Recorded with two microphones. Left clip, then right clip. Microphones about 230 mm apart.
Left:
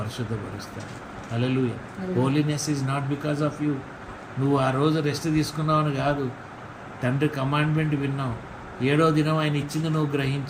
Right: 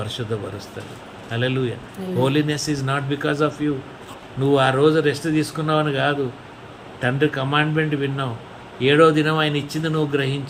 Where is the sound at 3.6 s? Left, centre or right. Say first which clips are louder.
Right 4 dB; right.